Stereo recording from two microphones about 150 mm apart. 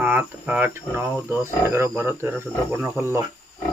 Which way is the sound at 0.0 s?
15° right (ahead or behind).